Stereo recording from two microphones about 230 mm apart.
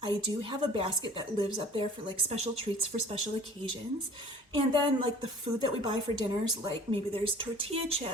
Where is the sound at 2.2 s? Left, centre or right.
Right.